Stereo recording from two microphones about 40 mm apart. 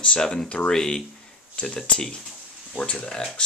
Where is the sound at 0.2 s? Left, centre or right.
Left.